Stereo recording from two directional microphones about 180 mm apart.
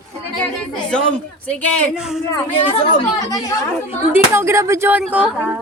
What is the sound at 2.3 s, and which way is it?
Speech, 30° left (ahead or behind).